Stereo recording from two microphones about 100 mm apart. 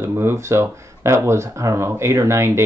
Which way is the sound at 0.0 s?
25° right (ahead or behind).